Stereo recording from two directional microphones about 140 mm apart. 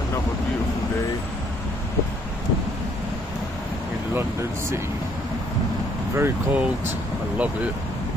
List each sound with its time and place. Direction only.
4.1 s speech: 20° right (ahead or behind)
6.1 s speech: 15° right (ahead or behind)